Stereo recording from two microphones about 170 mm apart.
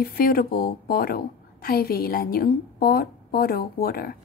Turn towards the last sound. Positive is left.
turn(degrees=60)  # may be behind; listen again after turning